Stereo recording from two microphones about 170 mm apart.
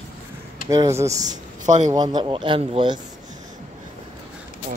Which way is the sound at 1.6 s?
45° right (ahead or behind).